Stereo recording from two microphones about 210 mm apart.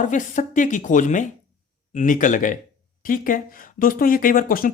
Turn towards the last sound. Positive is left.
turn(degrees=45)  # may be behind; listen again after turning